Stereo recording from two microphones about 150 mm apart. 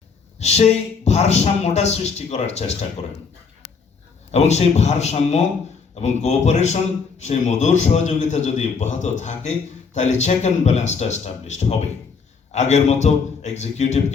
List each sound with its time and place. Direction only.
0.3 s a man's voice: 45° left (ahead or behind)
4.3 s a man's voice: 50° left (ahead or behind)